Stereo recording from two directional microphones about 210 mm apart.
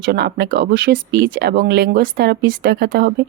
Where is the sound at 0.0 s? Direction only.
50° right (ahead or behind).